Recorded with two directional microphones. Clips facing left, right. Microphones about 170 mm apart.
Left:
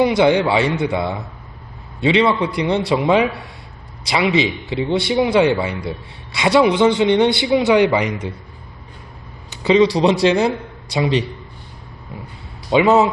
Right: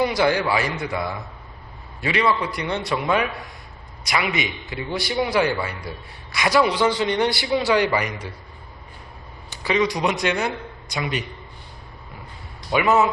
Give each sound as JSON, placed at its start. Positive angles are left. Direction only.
{"t": 0.0, "sound": "a man's voice", "side_deg": 20}
{"t": 9.5, "sound": "a man's voice", "side_deg": 20}
{"t": 12.7, "sound": "a man's voice", "side_deg": 25}